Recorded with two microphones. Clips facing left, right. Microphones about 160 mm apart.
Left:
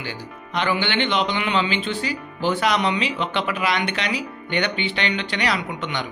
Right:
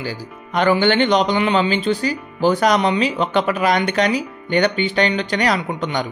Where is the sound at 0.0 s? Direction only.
45° right (ahead or behind).